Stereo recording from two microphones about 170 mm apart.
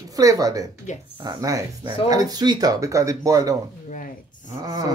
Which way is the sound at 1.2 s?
20° right (ahead or behind).